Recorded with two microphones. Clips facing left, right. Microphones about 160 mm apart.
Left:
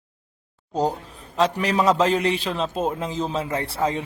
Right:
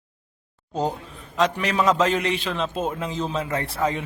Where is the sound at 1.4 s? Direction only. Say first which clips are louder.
Left 1 dB; 35° left (ahead or behind).